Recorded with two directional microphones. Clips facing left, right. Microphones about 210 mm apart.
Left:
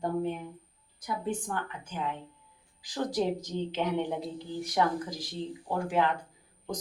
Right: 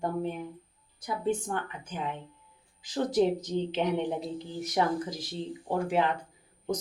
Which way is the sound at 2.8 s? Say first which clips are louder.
Right 4 dB; 20° right (ahead or behind).